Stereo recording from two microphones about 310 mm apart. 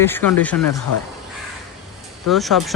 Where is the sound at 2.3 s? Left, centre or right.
Centre.